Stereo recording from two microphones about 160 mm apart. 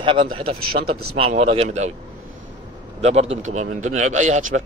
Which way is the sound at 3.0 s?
40° right (ahead or behind).